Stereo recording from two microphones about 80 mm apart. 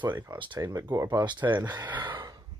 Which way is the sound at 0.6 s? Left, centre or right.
Right.